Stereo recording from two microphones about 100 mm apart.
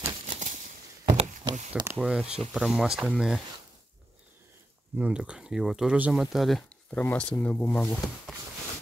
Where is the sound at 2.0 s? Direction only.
5° right (ahead or behind).